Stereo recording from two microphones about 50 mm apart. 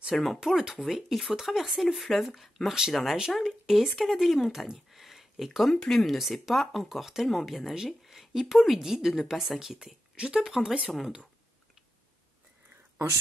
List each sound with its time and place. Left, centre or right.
0.1 s speech: centre
0.4 s speech: centre
3.6 s speech: centre
4.9 s a sound: centre
5.8 s speech: centre
9.5 s speech: centre